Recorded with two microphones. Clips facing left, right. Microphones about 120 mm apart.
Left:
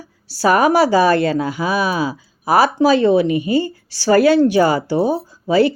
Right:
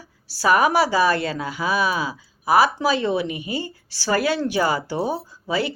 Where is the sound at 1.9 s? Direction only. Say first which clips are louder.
Left 5 dB; 35° left (ahead or behind).